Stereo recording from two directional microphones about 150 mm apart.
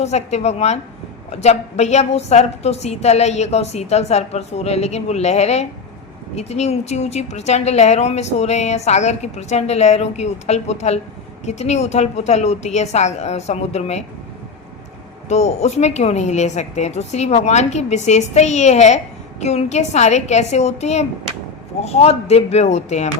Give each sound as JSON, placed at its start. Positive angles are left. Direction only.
{"t": 0.0, "sound": "a woman's voice", "side_deg": 45}
{"t": 15.3, "sound": "a woman's voice", "side_deg": 45}